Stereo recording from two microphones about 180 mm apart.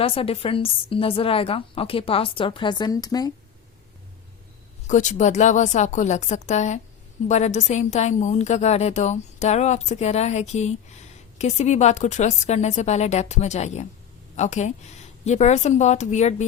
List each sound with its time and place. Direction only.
0.0 s a woman's voice: 30° left (ahead or behind)
4.9 s a woman's voice: 45° left (ahead or behind)